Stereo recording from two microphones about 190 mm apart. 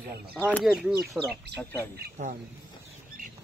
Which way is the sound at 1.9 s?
40° right (ahead or behind).